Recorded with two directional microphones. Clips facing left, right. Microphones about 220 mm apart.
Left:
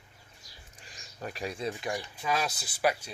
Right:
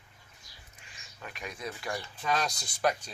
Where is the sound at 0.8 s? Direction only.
40° left (ahead or behind); by 2.3 s 15° left (ahead or behind).